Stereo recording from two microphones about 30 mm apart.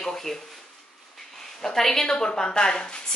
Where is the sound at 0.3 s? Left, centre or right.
Centre.